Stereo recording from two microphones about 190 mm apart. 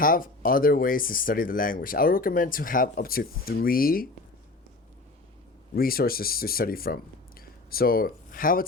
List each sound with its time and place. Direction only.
0.0 s speech: 45° left (ahead or behind)
5.7 s speech: 50° left (ahead or behind)